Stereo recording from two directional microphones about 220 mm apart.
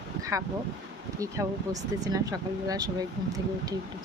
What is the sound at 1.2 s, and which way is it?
Speech, 15° right (ahead or behind).